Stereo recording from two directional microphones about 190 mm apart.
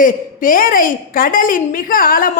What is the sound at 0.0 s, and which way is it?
A woman's voice, 45° left (ahead or behind).